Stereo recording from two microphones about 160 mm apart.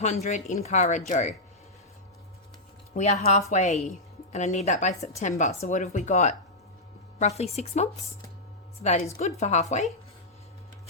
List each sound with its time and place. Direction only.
0.0 s a woman's voice: 45° left (ahead or behind)
2.9 s a woman's voice: 45° left (ahead or behind)